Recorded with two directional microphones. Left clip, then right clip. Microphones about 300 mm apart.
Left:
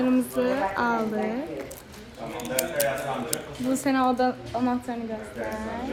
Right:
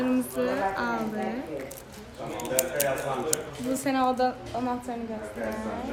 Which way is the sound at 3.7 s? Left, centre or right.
Centre.